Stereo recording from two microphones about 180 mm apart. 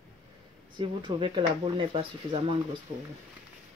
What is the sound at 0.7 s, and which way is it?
Speech, 25° right (ahead or behind).